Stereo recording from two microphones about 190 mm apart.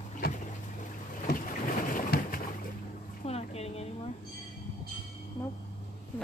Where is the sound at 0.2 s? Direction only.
50° left (ahead or behind).